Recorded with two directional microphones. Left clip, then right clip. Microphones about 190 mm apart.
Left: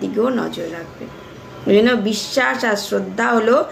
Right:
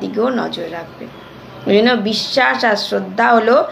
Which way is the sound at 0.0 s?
20° left (ahead or behind).